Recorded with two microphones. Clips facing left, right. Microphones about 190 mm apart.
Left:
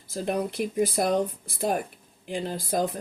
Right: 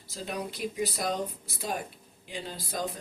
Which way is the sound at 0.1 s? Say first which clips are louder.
Left 8 dB; 55° left (ahead or behind).